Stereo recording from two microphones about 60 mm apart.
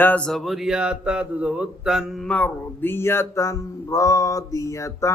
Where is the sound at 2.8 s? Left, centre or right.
Left.